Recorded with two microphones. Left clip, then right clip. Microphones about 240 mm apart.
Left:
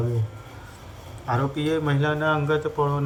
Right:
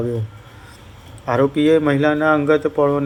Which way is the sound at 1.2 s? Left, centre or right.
Centre.